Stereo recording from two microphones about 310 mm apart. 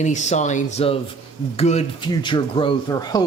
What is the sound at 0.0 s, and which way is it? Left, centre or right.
Speech, left.